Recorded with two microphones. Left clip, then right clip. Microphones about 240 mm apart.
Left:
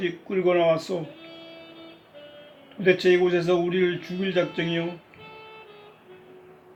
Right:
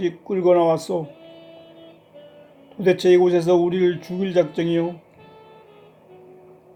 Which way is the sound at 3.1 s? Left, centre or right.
Right.